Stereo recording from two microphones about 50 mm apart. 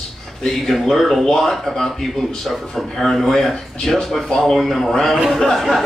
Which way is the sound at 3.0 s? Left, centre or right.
Centre.